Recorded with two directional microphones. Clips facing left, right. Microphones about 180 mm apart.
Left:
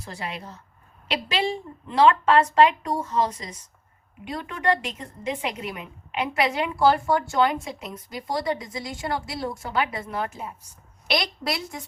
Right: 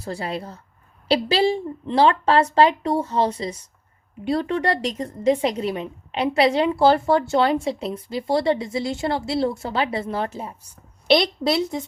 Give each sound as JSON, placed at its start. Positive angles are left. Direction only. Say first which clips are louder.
{"t": 0.0, "sound": "a woman's voice", "louder": "right 6 dB", "side_deg": -35}